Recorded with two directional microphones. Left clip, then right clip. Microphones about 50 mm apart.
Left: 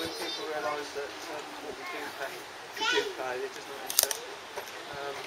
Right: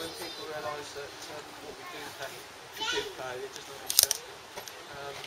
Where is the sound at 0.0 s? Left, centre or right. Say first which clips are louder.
Left 4 dB; right.